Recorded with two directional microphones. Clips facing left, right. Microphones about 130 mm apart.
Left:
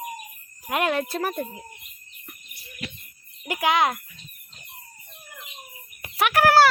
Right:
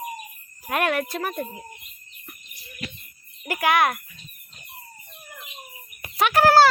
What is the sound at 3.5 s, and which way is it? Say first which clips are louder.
Speech: right 1 dB; 20° left (ahead or behind).